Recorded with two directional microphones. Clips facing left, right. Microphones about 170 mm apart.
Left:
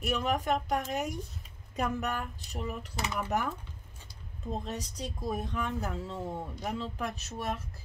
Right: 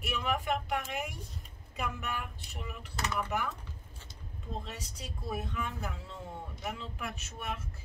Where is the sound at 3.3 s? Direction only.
40° left (ahead or behind).